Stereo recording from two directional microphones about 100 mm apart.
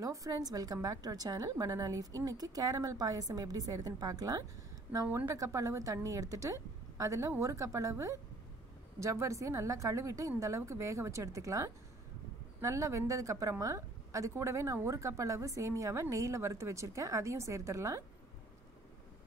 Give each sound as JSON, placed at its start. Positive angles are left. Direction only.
{"t": 0.0, "sound": "a woman's voice", "side_deg": -35}
{"t": 5.0, "sound": "a woman's voice", "side_deg": -20}
{"t": 9.0, "sound": "a woman's voice", "side_deg": -30}